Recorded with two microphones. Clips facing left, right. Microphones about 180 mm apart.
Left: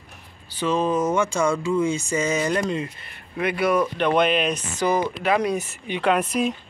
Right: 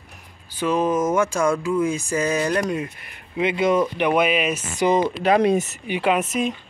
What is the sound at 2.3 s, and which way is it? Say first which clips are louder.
Speech: right 1 dB; centre (ahead or behind).